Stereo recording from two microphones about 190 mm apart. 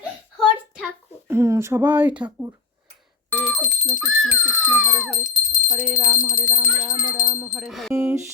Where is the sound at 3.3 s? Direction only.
Centre (ahead or behind).